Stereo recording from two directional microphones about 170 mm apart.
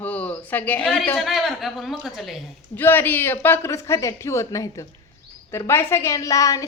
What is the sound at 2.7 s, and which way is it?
A woman's voice, 10° left (ahead or behind).